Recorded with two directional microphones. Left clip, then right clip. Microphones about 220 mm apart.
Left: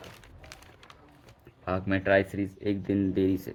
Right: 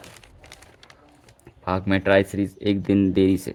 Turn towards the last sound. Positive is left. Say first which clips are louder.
# right 7 dB
turn(degrees=-50)  # may be behind; listen again after turning